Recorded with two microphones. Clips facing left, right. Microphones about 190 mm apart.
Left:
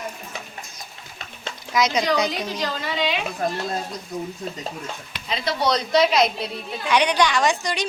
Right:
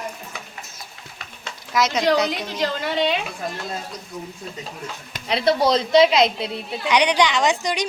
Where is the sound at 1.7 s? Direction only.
Centre (ahead or behind).